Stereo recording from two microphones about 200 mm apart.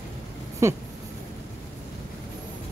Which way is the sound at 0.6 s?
15° right (ahead or behind).